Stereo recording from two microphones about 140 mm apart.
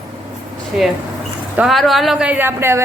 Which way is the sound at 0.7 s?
5° right (ahead or behind).